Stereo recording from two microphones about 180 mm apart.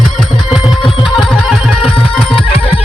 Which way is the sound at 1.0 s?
Centre (ahead or behind).